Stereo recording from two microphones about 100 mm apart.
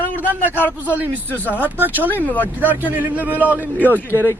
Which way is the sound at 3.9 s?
20° left (ahead or behind).